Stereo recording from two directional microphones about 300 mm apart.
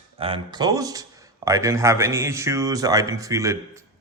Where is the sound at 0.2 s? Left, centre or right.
Centre.